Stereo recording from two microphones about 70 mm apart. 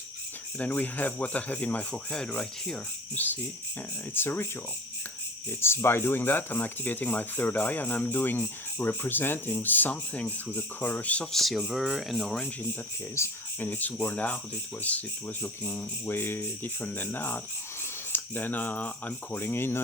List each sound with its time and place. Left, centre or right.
0.6 s speech: left
3.2 s speech: left
5.5 s speech: left
11.3 s speech: centre
13.2 s speech: left
13.6 s speech: left
15.4 s speech: left